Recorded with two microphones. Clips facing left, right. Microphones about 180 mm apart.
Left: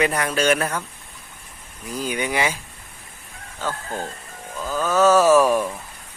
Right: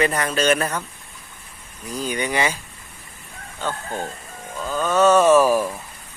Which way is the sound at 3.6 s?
5° left (ahead or behind).